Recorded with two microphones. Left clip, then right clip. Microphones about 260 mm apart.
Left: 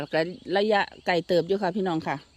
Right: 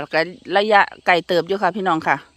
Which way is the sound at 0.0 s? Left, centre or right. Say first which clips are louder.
Right 6 dB; centre.